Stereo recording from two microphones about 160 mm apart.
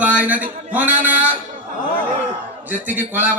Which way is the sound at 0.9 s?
55° right (ahead or behind).